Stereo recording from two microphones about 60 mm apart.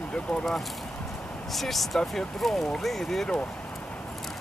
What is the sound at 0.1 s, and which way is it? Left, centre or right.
Speech, centre.